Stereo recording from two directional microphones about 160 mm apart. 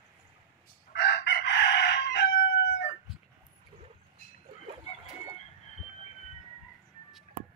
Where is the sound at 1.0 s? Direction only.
90° left.